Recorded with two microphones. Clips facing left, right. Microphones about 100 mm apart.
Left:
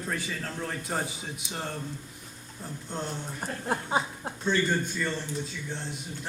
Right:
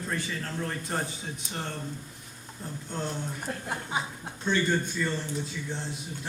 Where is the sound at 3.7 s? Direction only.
35° left (ahead or behind).